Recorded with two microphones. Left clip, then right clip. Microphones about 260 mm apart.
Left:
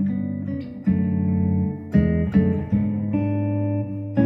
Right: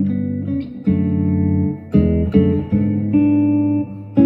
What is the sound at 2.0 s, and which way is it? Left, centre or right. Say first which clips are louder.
Guitar: right 6 dB; left.